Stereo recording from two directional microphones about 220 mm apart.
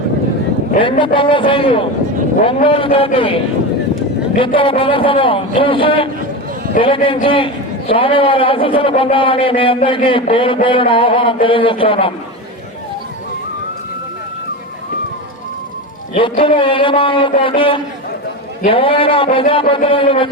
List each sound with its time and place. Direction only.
0.8 s a man's voice: 20° left (ahead or behind)
4.4 s a man's voice: 25° left (ahead or behind)
16.1 s a man's voice: 25° left (ahead or behind)